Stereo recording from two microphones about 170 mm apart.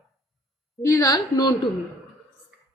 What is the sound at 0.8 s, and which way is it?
Speech, 20° left (ahead or behind).